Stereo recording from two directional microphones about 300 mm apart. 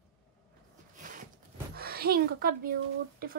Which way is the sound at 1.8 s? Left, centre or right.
Right.